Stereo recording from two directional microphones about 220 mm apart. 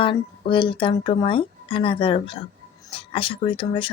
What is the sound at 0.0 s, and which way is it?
Speech, 25° left (ahead or behind).